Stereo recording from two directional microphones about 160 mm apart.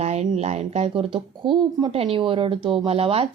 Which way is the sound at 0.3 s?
40° right (ahead or behind).